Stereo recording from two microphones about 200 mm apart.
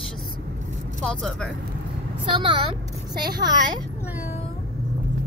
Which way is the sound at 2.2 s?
25° right (ahead or behind).